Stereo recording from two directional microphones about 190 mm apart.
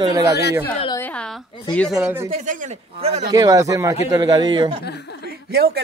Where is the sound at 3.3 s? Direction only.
20° right (ahead or behind).